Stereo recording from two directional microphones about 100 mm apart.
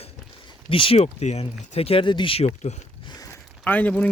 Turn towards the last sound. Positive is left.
turn(degrees=15)  # may be behind; listen again after turning